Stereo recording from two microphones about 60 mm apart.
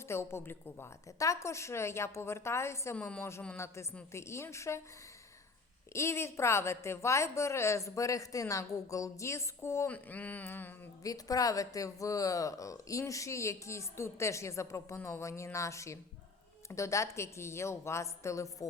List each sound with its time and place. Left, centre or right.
0.1 s a woman's voice: left
1.2 s a woman's voice: left
5.9 s a woman's voice: left
9.9 s a sound: left
11.0 s speech: left